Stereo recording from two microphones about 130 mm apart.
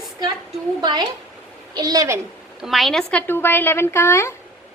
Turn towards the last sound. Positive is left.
turn(degrees=20)  # may be behind; listen again after turning